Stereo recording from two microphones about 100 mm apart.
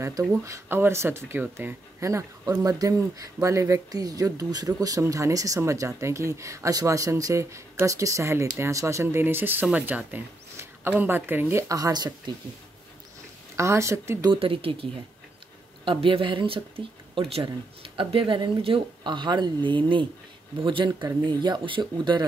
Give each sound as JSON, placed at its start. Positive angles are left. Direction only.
{"t": 0.0, "sound": "speech", "side_deg": -30}
{"t": 2.0, "sound": "speech", "side_deg": -30}
{"t": 11.7, "sound": "speech", "side_deg": -40}
{"t": 13.6, "sound": "speech", "side_deg": -30}
{"t": 14.3, "sound": "speech", "side_deg": -65}